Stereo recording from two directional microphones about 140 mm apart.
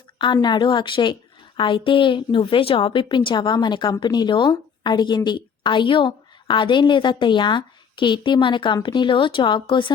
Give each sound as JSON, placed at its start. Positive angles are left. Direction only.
{"t": 0.2, "sound": "a woman's voice", "side_deg": 35}